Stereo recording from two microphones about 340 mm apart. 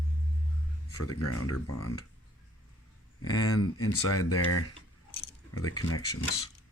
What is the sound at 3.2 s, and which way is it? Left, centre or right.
Speech, left.